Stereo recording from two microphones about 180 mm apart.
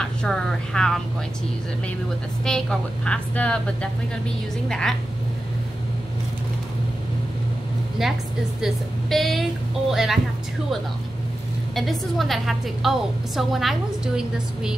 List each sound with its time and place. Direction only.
0.0 s a woman's voice: 5° left (ahead or behind)
2.4 s a woman's voice: 5° left (ahead or behind)
8.0 s a woman's voice: centre (ahead or behind)
11.7 s a woman's voice: centre (ahead or behind)